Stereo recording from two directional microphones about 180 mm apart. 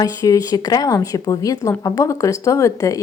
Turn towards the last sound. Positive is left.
turn(degrees=15)  # may be behind; listen again after turning